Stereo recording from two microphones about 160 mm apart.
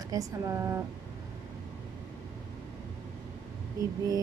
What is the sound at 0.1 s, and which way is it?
Speech, 20° right (ahead or behind).